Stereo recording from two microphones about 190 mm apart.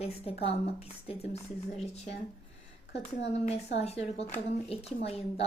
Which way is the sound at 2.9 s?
65° left (ahead or behind).